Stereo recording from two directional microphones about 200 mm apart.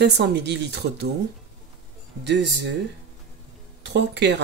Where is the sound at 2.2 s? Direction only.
60° right (ahead or behind).